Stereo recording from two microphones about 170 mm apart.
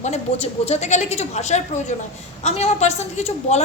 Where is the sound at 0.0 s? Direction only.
40° left (ahead or behind).